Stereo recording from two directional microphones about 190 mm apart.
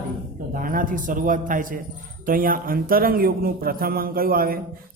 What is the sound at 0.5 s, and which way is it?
A man's voice, 45° right (ahead or behind).